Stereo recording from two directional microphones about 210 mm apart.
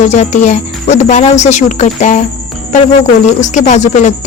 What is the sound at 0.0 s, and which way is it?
Speech, 35° left (ahead or behind).